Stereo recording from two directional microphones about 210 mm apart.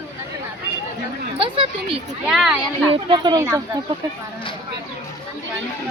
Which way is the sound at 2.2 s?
5° right (ahead or behind).